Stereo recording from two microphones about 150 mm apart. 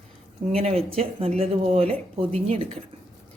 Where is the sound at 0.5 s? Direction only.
45° right (ahead or behind).